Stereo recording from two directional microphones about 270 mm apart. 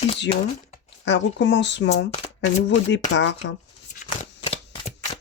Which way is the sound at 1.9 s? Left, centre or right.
Left.